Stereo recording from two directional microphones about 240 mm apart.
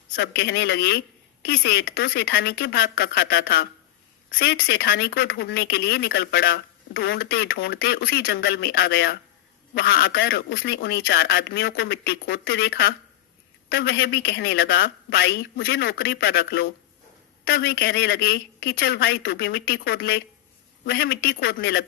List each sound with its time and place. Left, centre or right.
0.2 s speech: left